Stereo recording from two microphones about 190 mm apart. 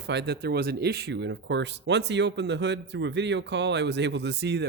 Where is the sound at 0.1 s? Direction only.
60° right (ahead or behind).